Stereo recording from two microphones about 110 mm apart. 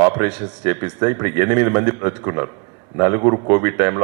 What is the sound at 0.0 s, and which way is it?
A man's voice, 20° right (ahead or behind).